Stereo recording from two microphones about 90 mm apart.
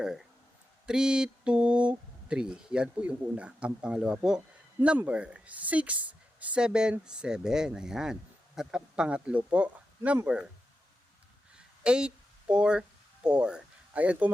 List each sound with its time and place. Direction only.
0.0 s speech: 5° right (ahead or behind)
11.5 s a sound: 10° right (ahead or behind)
13.2 s speech: 10° right (ahead or behind)